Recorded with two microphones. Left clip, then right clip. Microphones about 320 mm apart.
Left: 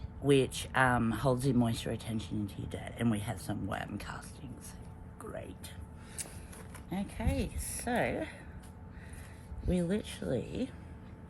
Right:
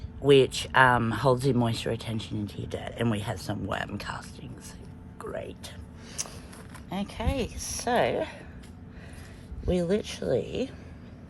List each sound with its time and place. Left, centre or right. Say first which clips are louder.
0.3 s speech: right 8 dB; right
5.2 s music: right 8 dB; right
6.9 s speech: right 6 dB; centre
9.6 s speech: right 8 dB; centre